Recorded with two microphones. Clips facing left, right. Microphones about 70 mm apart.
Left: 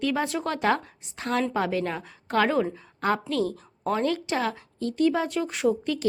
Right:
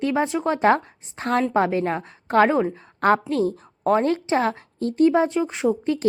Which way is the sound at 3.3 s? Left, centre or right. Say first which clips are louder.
Right 4 dB; right.